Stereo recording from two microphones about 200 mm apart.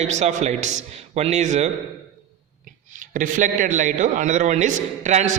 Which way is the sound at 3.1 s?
40° right (ahead or behind).